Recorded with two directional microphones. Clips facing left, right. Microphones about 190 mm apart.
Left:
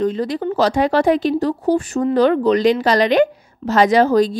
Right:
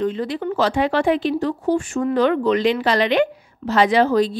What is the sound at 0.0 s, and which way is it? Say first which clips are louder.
A woman's voice: left 3 dB; 40° left (ahead or behind).